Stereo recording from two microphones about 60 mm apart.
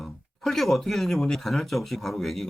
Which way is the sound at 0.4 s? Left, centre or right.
Centre.